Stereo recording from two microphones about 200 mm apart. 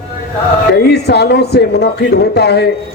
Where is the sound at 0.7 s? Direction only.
55° left (ahead or behind).